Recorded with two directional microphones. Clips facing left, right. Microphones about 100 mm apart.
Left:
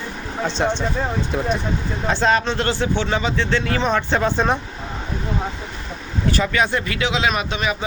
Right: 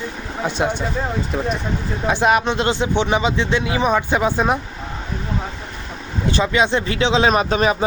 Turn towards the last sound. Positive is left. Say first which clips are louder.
# right 6 dB
turn(degrees=-40)  # may be behind; listen again after turning